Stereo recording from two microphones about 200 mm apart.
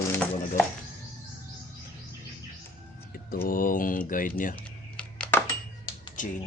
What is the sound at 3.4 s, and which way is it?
Speech, 45° left (ahead or behind).